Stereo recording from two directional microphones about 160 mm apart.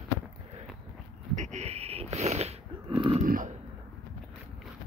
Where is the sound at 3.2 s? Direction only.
60° right (ahead or behind).